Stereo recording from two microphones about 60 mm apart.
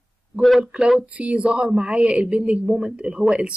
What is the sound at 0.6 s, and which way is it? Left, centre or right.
Speech, centre.